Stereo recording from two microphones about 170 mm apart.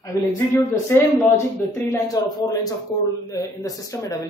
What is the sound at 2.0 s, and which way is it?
A man's voice, 20° left (ahead or behind).